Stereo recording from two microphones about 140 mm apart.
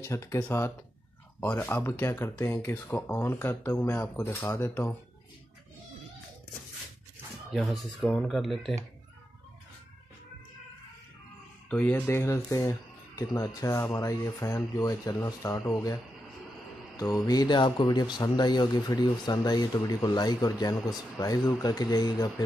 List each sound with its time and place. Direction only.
0.0 s speech: 20° left (ahead or behind)
7.5 s speech: centre (ahead or behind)
11.7 s speech: 15° left (ahead or behind); by 22.3 s 30° left (ahead or behind)